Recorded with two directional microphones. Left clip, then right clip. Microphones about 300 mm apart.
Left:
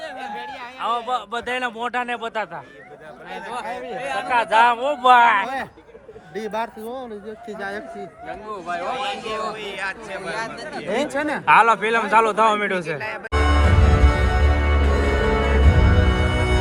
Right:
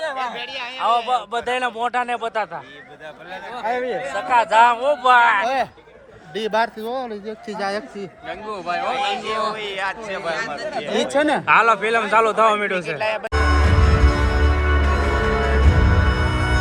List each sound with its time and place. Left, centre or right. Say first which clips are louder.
0.0 s a man's voice: right 5 dB; centre
0.8 s a man's voice: right 4 dB; centre
4.3 s a man's voice: right 2 dB; centre
6.3 s speech: right 6 dB; right
8.9 s speech: right 4 dB; right
11.2 s speech: right 6 dB; right
11.4 s a man's voice: left 4 dB; centre
13.0 s speech: right 7 dB; right
13.3 s music: right 1 dB; centre